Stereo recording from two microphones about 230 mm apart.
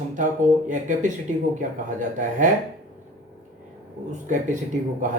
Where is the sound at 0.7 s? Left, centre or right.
Right.